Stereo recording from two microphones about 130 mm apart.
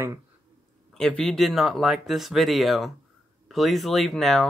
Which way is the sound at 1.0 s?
5° left (ahead or behind).